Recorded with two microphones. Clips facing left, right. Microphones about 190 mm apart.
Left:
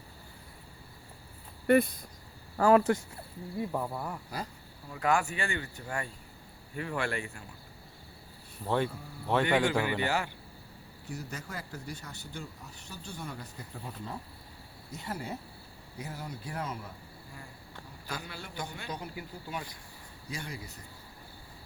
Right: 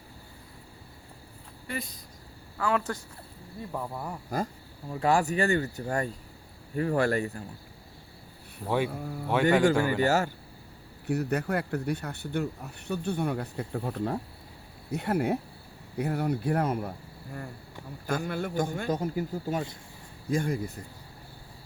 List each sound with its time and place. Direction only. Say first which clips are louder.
1.6 s speech: left 13 dB; 60° left (ahead or behind)
2.6 s speech: left 6 dB; 40° left (ahead or behind)
3.9 s speech: right 1 dB; 10° right (ahead or behind)
4.9 s speech: right 4 dB; 30° right (ahead or behind)
8.6 s speech: right 2 dB; 10° right (ahead or behind)
8.9 s speech: right 10 dB; 60° right (ahead or behind)
9.3 s a man's voice: right 4 dB; centre (ahead or behind)
10.0 s a man's voice: right 7 dB; 45° right (ahead or behind)
11.0 s speech: right 13 dB; 65° right (ahead or behind)
18.0 s a man's voice: right 12 dB; 50° right (ahead or behind)